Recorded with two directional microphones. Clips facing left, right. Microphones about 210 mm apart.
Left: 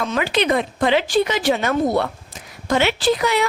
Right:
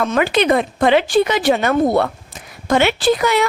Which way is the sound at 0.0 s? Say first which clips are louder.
Right 4 dB; 55° right (ahead or behind).